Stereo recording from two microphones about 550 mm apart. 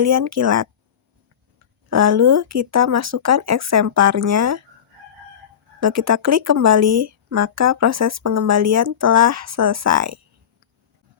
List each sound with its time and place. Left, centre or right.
0.0 s speech: right
1.9 s speech: right
5.8 s speech: right